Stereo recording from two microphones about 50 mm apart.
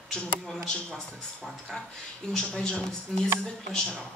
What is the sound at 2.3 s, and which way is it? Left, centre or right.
Speech, centre.